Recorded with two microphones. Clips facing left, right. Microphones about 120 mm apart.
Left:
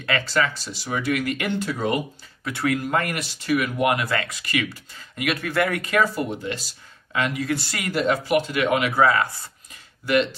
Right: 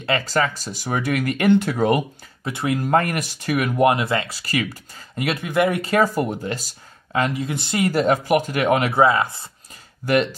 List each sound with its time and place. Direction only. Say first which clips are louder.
0.2 s speech: right 2 dB; 45° right (ahead or behind)
1.5 s speech: right 10 dB; 55° right (ahead or behind)
2.4 s speech: right 1 dB; 25° right (ahead or behind)
2.8 s speech: right 5 dB; 40° right (ahead or behind)
3.8 s speech: right 4 dB; 25° right (ahead or behind)
5.4 s speech: right 5 dB; 20° right (ahead or behind)
5.8 s speech: right 3 dB; 30° right (ahead or behind)
6.0 s speech: right 3 dB; 45° right (ahead or behind)
7.4 s speech: right 5 dB; 20° right (ahead or behind)
7.9 s speech: right 1 dB; 45° right (ahead or behind)
8.9 s speech: right 2 dB; 20° right (ahead or behind)
10.0 s speech: right 2 dB; 45° right (ahead or behind)